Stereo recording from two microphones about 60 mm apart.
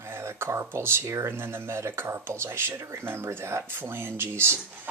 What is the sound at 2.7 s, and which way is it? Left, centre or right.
Speech, right.